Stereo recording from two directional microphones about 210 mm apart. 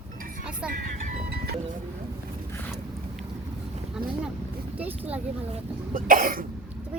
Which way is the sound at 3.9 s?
5° right (ahead or behind).